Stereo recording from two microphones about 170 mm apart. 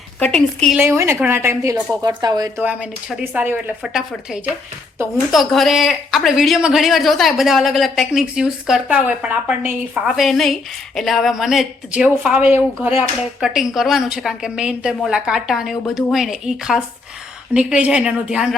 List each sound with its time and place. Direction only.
0.2 s a woman's voice: 5° left (ahead or behind)
0.8 s speech: 15° right (ahead or behind)
2.6 s a woman's voice: 10° right (ahead or behind)